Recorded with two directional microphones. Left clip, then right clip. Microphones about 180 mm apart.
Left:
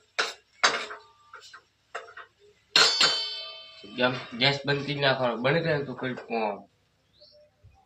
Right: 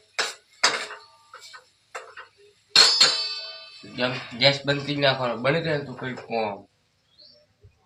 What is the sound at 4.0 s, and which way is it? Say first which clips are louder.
A man's voice: right 2 dB; 20° right (ahead or behind).